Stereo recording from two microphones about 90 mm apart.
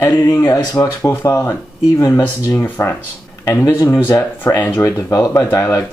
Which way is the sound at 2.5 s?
20° left (ahead or behind).